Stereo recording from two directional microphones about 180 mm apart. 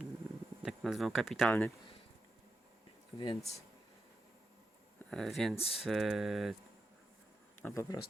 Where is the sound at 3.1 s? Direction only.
25° left (ahead or behind).